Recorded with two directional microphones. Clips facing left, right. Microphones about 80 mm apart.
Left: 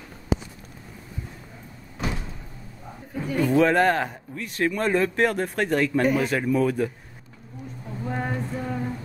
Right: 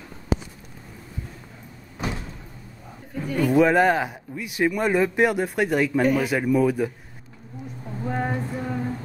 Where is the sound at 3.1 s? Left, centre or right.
Centre.